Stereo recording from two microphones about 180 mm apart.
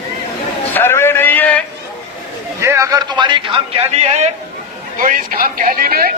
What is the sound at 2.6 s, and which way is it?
A man's voice, 15° right (ahead or behind).